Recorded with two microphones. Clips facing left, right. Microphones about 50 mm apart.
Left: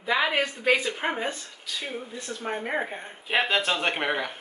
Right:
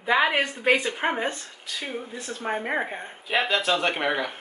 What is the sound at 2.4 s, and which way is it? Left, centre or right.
Speech, centre.